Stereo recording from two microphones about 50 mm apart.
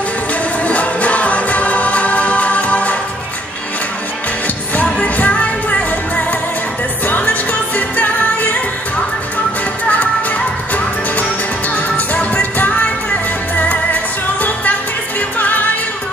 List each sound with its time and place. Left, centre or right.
0.3 s music: left
4.7 s music: left